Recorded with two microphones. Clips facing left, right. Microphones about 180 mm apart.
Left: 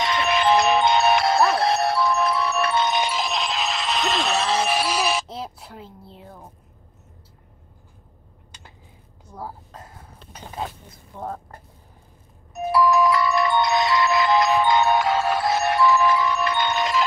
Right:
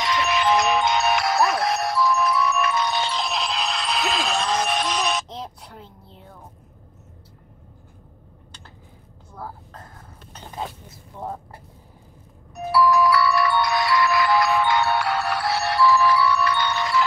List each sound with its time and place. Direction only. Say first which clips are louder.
0.0 s music: left 1 dB; 30° left (ahead or behind)
1.9 s music: even; 60° left (ahead or behind)
2.1 s music: even; 30° left (ahead or behind)
3.1 s music: left 1 dB; centre (ahead or behind)
6.0 s a sound: left 3 dB; 5° left (ahead or behind)
9.3 s speech: left 1 dB; 10° left (ahead or behind)
10.9 s speech: even; 5° right (ahead or behind)
12.5 s music: even; 20° left (ahead or behind)